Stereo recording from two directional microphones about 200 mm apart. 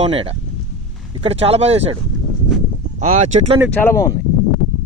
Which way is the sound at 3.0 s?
35° right (ahead or behind).